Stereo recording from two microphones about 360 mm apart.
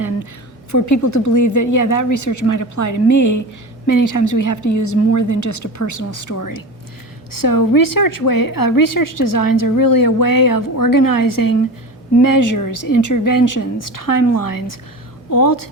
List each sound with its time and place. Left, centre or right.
0.7 s a woman's voice: left